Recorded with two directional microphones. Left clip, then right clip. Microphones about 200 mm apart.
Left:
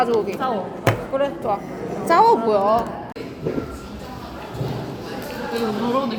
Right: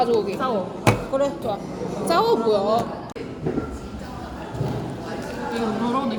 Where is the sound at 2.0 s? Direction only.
20° left (ahead or behind).